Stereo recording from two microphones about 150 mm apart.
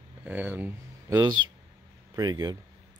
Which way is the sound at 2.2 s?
25° right (ahead or behind).